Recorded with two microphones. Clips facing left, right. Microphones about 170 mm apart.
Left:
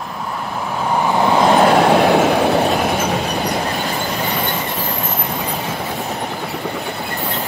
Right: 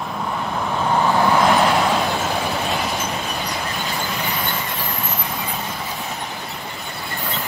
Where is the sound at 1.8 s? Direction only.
65° left (ahead or behind).